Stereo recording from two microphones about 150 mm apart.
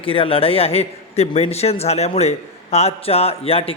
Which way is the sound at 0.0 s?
35° left (ahead or behind).